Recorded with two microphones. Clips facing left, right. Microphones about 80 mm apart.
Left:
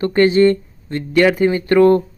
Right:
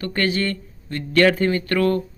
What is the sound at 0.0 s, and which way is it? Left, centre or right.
Speech, left.